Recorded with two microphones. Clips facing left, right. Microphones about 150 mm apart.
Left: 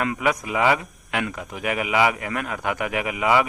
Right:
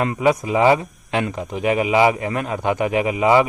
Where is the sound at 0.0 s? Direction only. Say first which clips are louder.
Right 5 dB; 30° right (ahead or behind).